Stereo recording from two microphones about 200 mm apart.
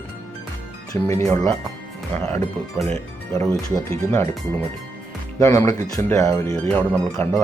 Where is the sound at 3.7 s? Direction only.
15° left (ahead or behind).